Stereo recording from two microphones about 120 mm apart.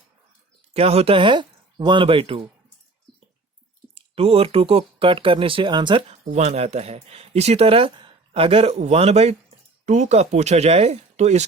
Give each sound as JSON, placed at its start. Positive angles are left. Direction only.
{"t": 0.7, "sound": "speech", "side_deg": -55}
{"t": 3.9, "sound": "speech", "side_deg": -55}
{"t": 6.1, "sound": "speech", "side_deg": -70}
{"t": 9.8, "sound": "speech", "side_deg": -85}